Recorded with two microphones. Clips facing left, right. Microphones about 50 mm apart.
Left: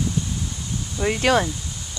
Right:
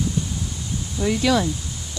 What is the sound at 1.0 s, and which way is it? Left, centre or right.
Speech, left.